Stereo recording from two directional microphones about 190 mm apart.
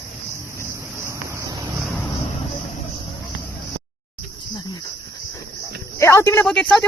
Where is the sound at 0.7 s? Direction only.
15° right (ahead or behind).